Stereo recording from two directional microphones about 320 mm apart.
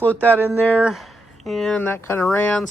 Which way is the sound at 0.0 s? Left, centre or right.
Centre.